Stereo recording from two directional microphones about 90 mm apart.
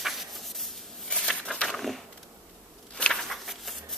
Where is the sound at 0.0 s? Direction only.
Centre (ahead or behind).